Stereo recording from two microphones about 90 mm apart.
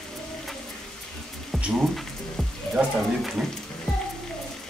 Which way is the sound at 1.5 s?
5° right (ahead or behind).